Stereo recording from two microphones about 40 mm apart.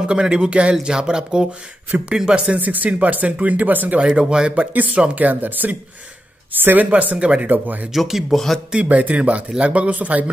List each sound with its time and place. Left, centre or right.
0.0 s speech: right
1.9 s speech: right
4.0 s speech: right
4.7 s speech: right
6.9 s speech: right
7.9 s speech: centre
8.8 s speech: right